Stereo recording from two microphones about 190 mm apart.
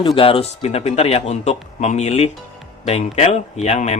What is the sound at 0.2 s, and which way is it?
Speech, 30° left (ahead or behind).